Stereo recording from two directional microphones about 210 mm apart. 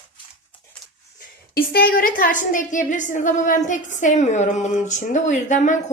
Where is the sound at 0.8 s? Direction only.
Centre (ahead or behind).